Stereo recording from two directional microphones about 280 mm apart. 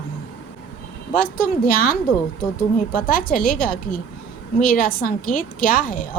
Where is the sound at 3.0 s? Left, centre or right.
Left.